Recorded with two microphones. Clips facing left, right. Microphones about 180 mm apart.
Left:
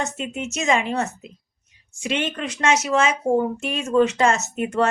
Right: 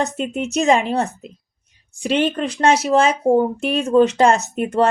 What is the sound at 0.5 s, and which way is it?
A woman's voice, 35° right (ahead or behind).